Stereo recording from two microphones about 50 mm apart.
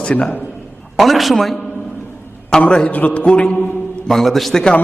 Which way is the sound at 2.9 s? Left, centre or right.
Left.